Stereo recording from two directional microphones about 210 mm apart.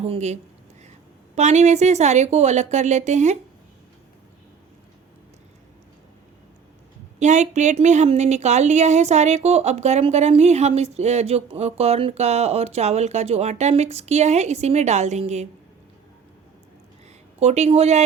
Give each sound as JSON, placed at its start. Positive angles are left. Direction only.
{"t": 0.0, "sound": "a woman's voice", "side_deg": -30}
{"t": 1.4, "sound": "a woman's voice", "side_deg": -35}
{"t": 7.2, "sound": "a woman's voice", "side_deg": -35}
{"t": 17.4, "sound": "a woman's voice", "side_deg": -30}